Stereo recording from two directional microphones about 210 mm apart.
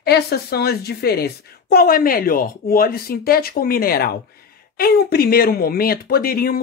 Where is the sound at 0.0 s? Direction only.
50° left (ahead or behind).